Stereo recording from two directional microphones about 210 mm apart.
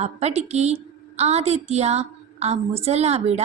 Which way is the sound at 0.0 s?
30° right (ahead or behind).